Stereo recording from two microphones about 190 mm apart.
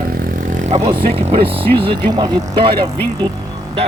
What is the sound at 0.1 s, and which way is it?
Vehicle, 50° right (ahead or behind).